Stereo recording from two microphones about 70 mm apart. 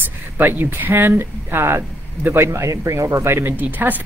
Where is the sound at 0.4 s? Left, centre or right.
Right.